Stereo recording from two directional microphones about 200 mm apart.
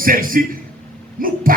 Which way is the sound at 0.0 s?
45° right (ahead or behind).